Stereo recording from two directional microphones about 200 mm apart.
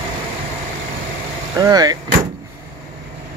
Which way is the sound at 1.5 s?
20° right (ahead or behind).